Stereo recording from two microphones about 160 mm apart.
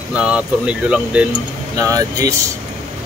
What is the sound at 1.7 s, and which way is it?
Speech, 20° right (ahead or behind).